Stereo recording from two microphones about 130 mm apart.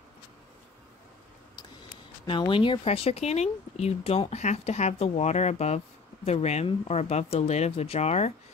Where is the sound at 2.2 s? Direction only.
40° left (ahead or behind).